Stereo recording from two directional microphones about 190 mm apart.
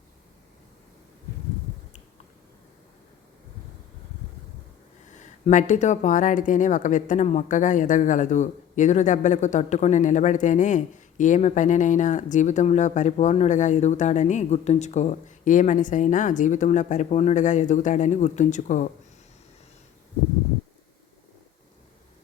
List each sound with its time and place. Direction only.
5.2 s speech: 40° left (ahead or behind)